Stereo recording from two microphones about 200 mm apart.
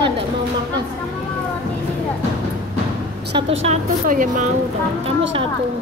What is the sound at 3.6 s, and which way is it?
Speech, 35° right (ahead or behind).